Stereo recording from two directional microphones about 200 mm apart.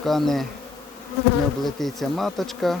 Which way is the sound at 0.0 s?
Centre (ahead or behind).